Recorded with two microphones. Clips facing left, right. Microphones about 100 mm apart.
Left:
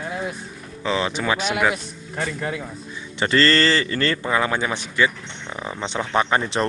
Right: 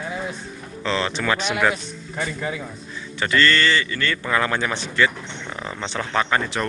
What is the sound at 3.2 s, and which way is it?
A man's voice, 35° left (ahead or behind).